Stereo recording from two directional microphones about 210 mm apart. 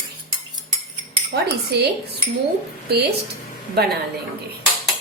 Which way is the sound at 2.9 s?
50° right (ahead or behind).